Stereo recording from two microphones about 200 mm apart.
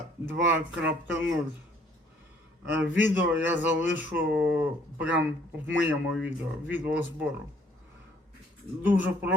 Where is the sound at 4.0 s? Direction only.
10° right (ahead or behind).